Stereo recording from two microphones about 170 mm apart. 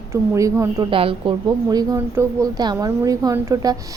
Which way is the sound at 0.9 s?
30° right (ahead or behind).